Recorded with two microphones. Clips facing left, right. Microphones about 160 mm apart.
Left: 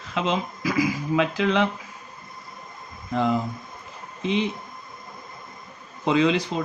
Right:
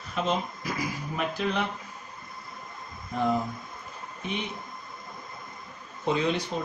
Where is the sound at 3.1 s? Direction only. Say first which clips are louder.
Left 4 dB; 90° left.